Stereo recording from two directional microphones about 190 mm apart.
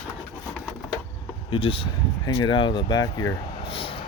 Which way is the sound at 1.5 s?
30° left (ahead or behind).